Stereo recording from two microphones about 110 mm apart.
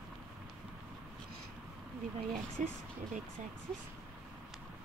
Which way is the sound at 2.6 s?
90° right.